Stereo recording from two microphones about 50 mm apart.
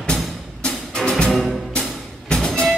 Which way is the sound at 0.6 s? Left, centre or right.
Centre.